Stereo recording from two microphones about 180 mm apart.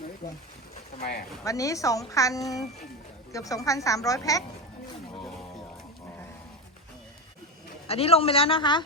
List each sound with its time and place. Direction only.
1.5 s a woman's voice: 20° left (ahead or behind)
7.9 s speech: 35° left (ahead or behind)